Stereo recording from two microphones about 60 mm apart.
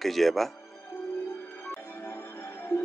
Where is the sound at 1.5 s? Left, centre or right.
Left.